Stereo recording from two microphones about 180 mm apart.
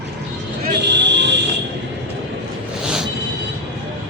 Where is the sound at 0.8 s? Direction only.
75° right (ahead or behind).